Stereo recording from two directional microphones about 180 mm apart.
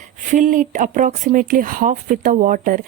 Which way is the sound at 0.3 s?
45° right (ahead or behind).